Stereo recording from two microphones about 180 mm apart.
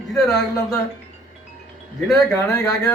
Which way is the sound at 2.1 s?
20° left (ahead or behind).